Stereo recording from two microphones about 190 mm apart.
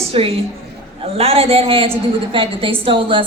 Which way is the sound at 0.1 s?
30° right (ahead or behind).